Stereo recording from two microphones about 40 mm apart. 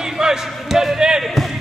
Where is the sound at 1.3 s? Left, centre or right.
Centre.